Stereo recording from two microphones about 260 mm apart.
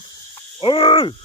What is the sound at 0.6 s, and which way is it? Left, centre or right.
Cricket, centre.